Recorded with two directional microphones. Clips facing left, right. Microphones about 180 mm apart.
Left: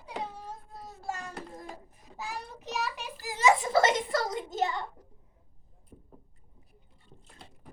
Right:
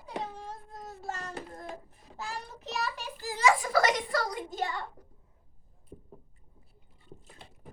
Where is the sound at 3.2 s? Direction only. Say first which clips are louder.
Left 1 dB; 20° left (ahead or behind).